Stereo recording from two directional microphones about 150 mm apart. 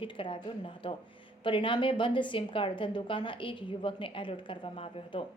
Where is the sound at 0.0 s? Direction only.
35° left (ahead or behind).